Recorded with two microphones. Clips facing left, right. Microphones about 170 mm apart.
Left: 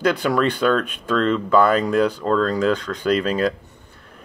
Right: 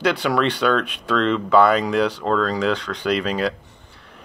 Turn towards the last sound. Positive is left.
turn(degrees=45)  # may be behind; listen again after turning